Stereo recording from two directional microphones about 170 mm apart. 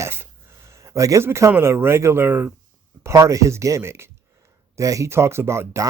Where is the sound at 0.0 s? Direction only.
15° right (ahead or behind).